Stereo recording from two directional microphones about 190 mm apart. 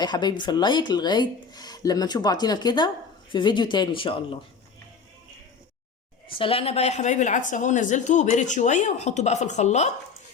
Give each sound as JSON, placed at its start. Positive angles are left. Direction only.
{"t": 0.0, "sound": "speech", "side_deg": 25}
{"t": 6.2, "sound": "a woman's voice", "side_deg": 30}